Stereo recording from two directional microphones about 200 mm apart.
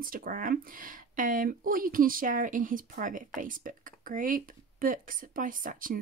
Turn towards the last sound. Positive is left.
turn(degrees=-40)  # may be behind; listen again after turning